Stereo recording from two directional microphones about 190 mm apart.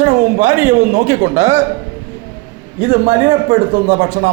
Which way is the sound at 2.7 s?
40° right (ahead or behind).